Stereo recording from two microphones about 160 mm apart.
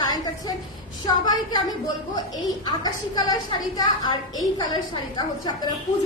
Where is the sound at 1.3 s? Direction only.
25° left (ahead or behind).